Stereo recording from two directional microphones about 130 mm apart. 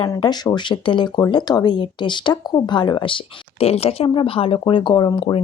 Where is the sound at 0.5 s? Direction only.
35° left (ahead or behind).